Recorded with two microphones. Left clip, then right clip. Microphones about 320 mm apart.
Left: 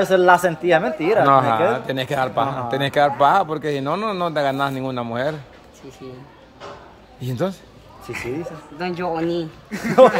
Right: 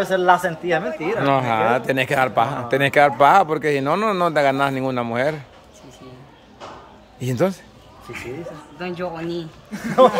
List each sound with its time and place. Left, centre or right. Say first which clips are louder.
0.0 s a man's voice: left 3 dB; left
1.3 s a man's voice: left 2 dB; centre
7.2 s a man's voice: right 4 dB; centre
8.7 s a man's voice: left 4 dB; centre